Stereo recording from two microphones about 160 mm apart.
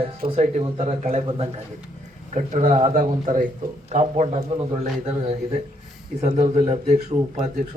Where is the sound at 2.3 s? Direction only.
50° right (ahead or behind).